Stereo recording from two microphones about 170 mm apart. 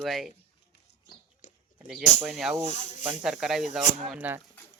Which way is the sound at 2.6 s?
45° left (ahead or behind).